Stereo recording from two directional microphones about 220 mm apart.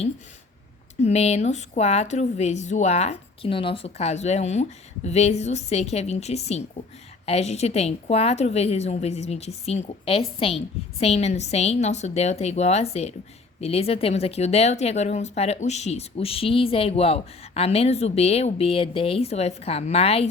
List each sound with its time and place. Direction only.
1.0 s speech: 30° left (ahead or behind)